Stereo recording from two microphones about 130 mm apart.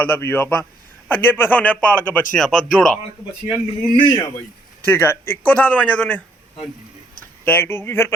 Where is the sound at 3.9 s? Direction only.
40° left (ahead or behind).